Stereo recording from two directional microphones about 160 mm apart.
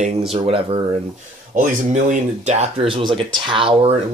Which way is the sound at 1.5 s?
50° right (ahead or behind).